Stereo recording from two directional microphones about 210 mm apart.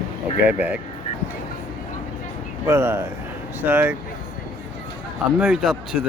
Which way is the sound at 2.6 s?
10° right (ahead or behind).